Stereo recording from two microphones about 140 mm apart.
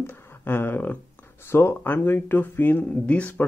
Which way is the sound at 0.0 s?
15° left (ahead or behind).